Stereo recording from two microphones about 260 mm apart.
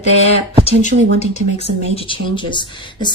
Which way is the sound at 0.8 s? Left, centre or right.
Left.